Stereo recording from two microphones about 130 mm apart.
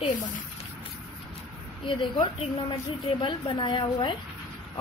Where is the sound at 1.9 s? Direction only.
35° left (ahead or behind).